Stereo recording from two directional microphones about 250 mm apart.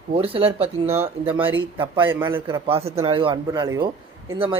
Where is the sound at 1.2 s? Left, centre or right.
Centre.